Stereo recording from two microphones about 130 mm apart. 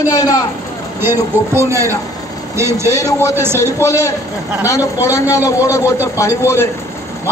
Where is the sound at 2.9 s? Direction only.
25° left (ahead or behind).